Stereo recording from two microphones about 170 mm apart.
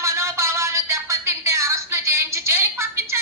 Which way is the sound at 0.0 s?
15° right (ahead or behind).